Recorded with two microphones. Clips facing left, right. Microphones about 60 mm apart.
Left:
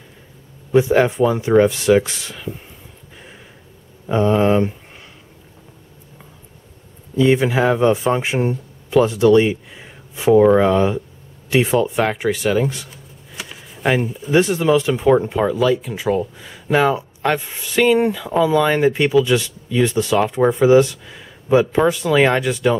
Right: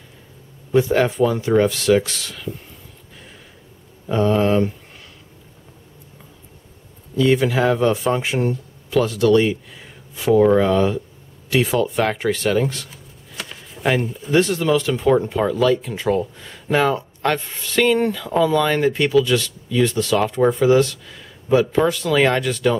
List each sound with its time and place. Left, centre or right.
0.7 s speech: centre
4.1 s speech: centre
7.2 s speech: left
12.0 s speech: centre
14.4 s speech: centre